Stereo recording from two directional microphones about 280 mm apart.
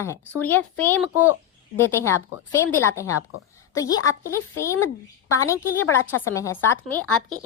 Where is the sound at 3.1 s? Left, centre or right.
Left.